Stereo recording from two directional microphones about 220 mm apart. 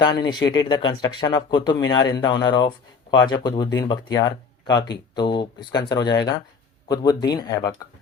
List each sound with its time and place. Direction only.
0.0 s speech: 20° left (ahead or behind)